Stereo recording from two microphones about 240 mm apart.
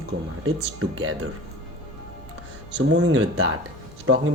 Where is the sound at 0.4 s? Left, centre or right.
Right.